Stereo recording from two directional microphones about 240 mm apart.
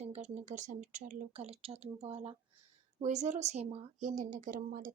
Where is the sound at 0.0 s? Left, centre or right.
Right.